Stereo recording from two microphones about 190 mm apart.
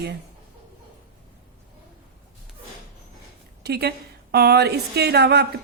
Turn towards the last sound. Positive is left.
turn(degrees=-60)  # may be behind; listen again after turning